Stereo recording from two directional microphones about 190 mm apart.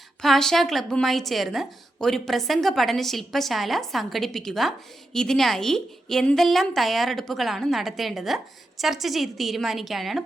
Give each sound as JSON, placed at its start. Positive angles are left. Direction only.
{"t": 0.2, "sound": "a woman's voice", "side_deg": 0}